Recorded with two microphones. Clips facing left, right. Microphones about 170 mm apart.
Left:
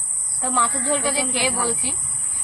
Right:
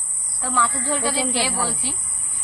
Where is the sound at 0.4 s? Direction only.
25° left (ahead or behind).